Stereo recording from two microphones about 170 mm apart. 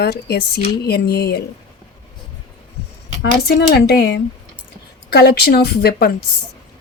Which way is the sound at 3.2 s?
70° left (ahead or behind).